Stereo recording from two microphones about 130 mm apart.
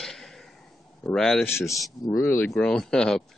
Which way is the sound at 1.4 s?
20° left (ahead or behind).